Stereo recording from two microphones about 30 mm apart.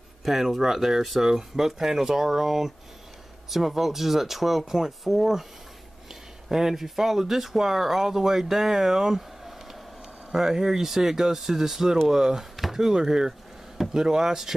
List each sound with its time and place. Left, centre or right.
0.2 s speech: centre
6.5 s speech: centre